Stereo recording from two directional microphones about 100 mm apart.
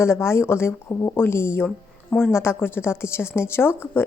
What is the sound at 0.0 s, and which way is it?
A woman's voice, 25° left (ahead or behind).